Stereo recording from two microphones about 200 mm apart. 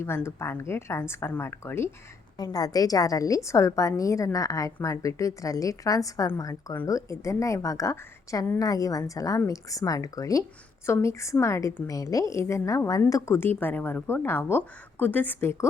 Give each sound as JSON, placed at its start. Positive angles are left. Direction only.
{"t": 0.0, "sound": "a woman's voice", "side_deg": 10}